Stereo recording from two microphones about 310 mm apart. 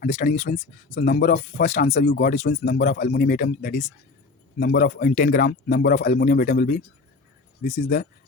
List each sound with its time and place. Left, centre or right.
0.0 s speech: left